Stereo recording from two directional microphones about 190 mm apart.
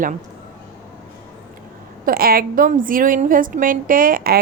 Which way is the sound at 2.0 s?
50° right (ahead or behind).